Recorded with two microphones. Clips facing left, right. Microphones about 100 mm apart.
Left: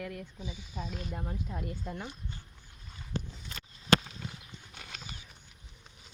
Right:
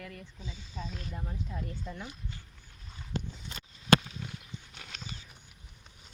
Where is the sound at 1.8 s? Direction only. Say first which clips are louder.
Left 2 dB; 25° left (ahead or behind).